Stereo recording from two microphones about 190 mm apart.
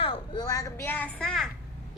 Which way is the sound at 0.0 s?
25° left (ahead or behind).